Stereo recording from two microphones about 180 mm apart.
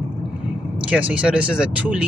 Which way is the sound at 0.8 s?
5° right (ahead or behind).